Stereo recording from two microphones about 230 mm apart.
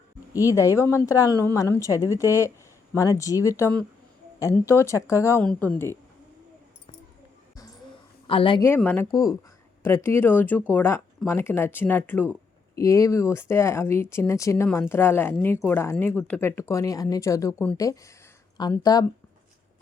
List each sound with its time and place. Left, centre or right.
0.3 s speech: centre
8.3 s speech: left